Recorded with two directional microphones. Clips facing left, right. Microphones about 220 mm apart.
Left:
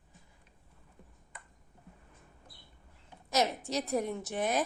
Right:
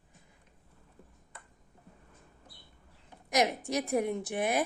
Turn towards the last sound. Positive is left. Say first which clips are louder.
# right 1 dB
turn(degrees=-10)  # may be behind; listen again after turning